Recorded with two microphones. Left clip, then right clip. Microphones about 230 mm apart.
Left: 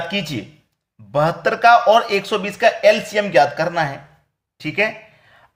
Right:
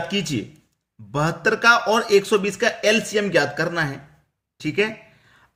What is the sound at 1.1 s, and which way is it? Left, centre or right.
Speech, right.